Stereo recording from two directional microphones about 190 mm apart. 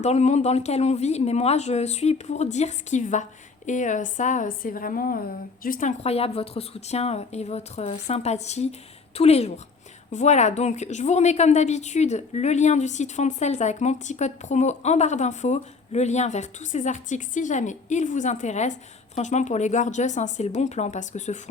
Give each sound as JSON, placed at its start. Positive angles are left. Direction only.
{"t": 0.0, "sound": "a woman's voice", "side_deg": 35}